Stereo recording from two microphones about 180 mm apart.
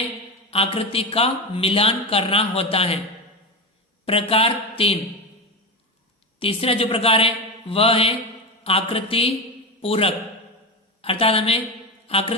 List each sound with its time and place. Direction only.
0.5 s a man's voice: 30° left (ahead or behind)
4.0 s a man's voice: 30° left (ahead or behind)
6.4 s a man's voice: 30° left (ahead or behind)